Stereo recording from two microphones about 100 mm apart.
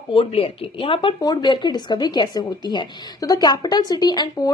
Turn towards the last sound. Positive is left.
turn(degrees=45)  # may be behind; listen again after turning